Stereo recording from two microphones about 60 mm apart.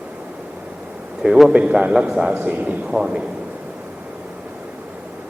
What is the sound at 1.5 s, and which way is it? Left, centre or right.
Speech, centre.